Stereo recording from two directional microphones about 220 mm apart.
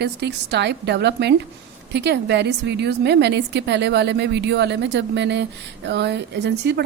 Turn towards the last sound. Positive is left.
turn(degrees=-50)  # may be behind; listen again after turning